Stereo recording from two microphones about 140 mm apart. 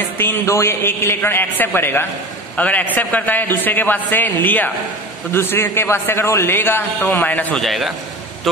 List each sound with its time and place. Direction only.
0.2 s a man's voice: 20° left (ahead or behind); by 7.9 s centre (ahead or behind)